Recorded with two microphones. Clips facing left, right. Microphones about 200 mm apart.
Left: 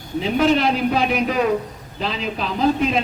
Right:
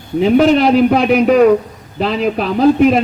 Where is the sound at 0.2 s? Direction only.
60° right (ahead or behind).